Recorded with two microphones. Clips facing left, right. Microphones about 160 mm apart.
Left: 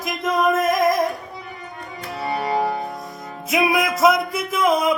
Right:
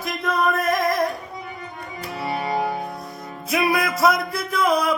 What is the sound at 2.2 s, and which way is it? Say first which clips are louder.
Music: left 2 dB; 5° right (ahead or behind).